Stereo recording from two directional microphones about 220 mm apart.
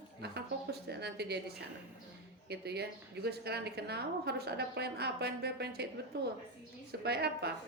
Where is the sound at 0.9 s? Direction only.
50° right (ahead or behind).